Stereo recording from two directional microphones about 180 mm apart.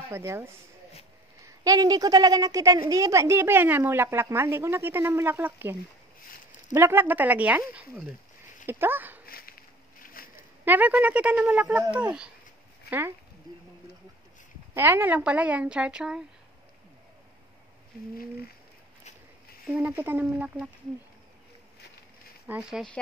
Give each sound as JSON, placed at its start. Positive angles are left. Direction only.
{"t": 0.1, "sound": "a woman's voice", "side_deg": -15}
{"t": 8.6, "sound": "speech", "side_deg": -10}
{"t": 9.2, "sound": "a sound", "side_deg": 55}
{"t": 10.6, "sound": "a woman's voice", "side_deg": -10}
{"t": 14.7, "sound": "a woman's voice", "side_deg": -10}
{"t": 19.7, "sound": "a woman's voice", "side_deg": -10}
{"t": 22.5, "sound": "speech", "side_deg": -5}